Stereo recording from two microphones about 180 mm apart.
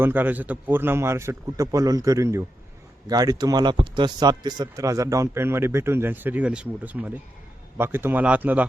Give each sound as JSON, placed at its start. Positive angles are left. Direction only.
{"t": 0.0, "sound": "speech", "side_deg": -10}